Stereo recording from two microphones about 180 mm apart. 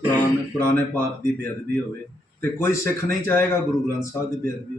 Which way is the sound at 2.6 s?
15° left (ahead or behind).